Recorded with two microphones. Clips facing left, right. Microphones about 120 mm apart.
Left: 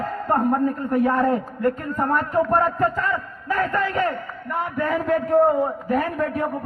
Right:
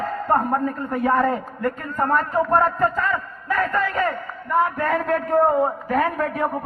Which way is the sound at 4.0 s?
45° right (ahead or behind).